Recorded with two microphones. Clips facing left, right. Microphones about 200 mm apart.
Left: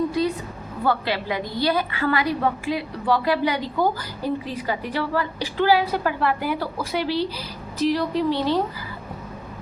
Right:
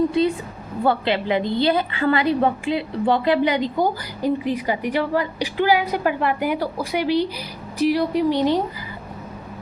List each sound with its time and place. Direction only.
0.2 s a woman's voice: 25° right (ahead or behind)